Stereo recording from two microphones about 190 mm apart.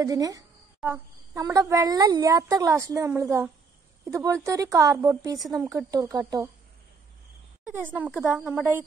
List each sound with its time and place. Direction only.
0.0 s a woman's voice: 20° right (ahead or behind)
7.6 s speech: 10° right (ahead or behind)